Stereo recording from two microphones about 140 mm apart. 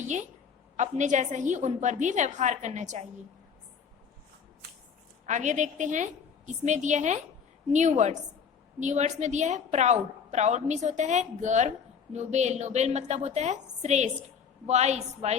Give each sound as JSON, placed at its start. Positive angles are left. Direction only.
{"t": 0.0, "sound": "a woman's voice", "side_deg": -60}
{"t": 5.2, "sound": "a woman's voice", "side_deg": -60}